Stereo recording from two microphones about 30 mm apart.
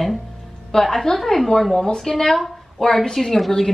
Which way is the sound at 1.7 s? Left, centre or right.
Left.